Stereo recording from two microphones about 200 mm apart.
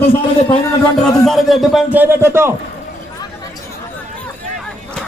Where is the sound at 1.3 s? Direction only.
Centre (ahead or behind).